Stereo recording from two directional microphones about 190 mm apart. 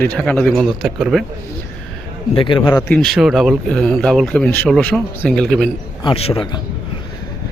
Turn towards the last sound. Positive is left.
turn(degrees=30)  # may be behind; listen again after turning